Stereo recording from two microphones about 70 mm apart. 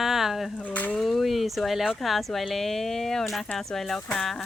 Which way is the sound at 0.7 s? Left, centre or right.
Left.